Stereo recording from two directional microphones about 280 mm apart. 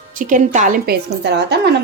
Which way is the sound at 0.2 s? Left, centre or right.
Right.